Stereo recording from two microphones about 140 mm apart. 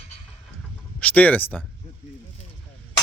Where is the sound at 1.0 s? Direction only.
10° left (ahead or behind).